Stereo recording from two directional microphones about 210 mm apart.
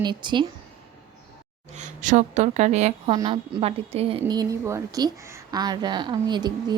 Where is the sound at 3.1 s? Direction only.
20° right (ahead or behind).